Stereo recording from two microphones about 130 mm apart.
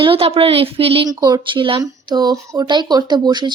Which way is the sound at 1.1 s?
30° right (ahead or behind).